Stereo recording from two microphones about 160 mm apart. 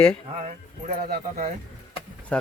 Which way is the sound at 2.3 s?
5° left (ahead or behind).